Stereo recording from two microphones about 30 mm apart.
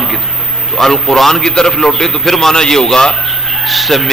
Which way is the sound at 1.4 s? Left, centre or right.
Left.